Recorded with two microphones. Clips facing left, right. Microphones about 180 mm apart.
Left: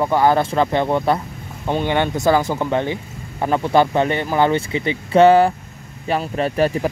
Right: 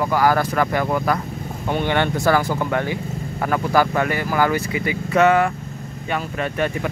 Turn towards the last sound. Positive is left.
turn(degrees=35)  # may be behind; listen again after turning